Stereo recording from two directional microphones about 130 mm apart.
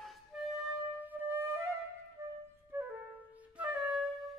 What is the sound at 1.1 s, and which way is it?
Music, 15° right (ahead or behind).